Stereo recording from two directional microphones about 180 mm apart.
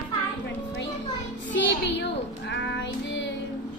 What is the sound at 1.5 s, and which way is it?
Child singing, 85° left.